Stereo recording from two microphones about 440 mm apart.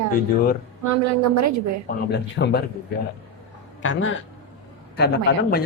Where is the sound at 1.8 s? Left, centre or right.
Left.